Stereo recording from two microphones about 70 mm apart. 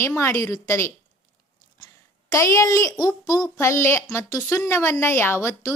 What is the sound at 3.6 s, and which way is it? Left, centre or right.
A woman's voice, left.